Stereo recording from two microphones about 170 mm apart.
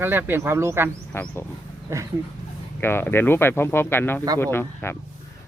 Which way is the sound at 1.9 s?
15° right (ahead or behind).